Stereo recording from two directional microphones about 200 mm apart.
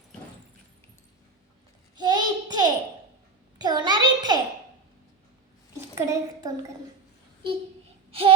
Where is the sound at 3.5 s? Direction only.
20° right (ahead or behind).